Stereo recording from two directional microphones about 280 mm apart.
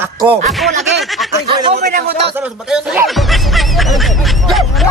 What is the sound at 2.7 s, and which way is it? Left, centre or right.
Music, centre.